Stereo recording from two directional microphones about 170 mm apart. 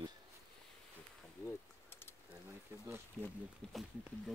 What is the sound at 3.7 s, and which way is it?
Speech, centre (ahead or behind).